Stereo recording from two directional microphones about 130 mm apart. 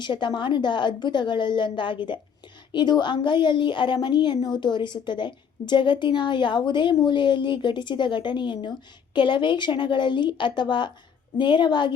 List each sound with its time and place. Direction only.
0.0 s a woman's voice: 35° left (ahead or behind)